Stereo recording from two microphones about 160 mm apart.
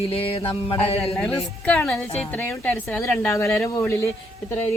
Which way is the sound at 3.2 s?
20° left (ahead or behind).